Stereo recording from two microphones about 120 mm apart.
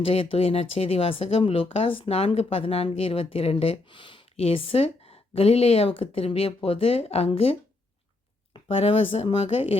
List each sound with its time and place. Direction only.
0.0 s speech: 55° left (ahead or behind)
8.7 s speech: 50° left (ahead or behind)